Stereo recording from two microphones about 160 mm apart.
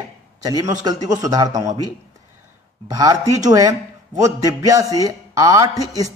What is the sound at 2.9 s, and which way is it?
A man's voice, 25° right (ahead or behind).